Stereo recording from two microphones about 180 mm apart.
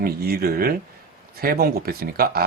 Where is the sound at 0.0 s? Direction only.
60° right (ahead or behind).